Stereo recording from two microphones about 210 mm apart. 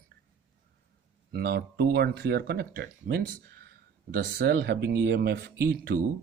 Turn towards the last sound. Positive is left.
turn(degrees=-50)  # may be behind; listen again after turning